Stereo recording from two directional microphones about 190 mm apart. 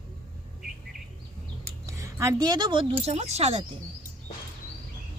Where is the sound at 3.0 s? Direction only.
35° right (ahead or behind).